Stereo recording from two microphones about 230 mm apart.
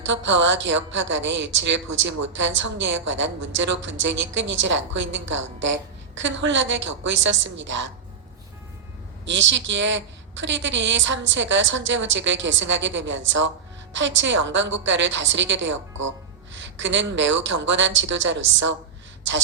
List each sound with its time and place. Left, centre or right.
0.0 s a woman's voice: right
9.2 s a woman's voice: right